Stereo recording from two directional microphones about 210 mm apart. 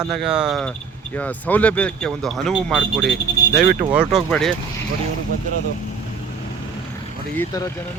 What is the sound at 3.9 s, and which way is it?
Speech, 5° right (ahead or behind).